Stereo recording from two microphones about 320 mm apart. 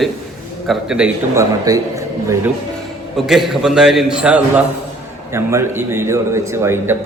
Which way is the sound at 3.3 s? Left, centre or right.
Centre.